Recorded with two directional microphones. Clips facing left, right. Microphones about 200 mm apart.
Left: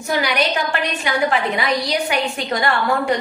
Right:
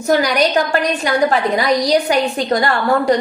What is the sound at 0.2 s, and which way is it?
A woman's voice, 40° right (ahead or behind).